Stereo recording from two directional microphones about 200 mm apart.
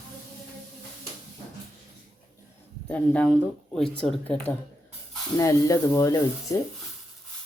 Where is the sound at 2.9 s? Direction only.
10° left (ahead or behind).